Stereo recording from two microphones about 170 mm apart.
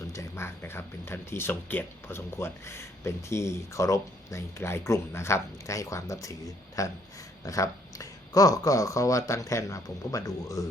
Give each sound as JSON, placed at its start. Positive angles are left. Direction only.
{"t": 0.1, "sound": "speech", "side_deg": 15}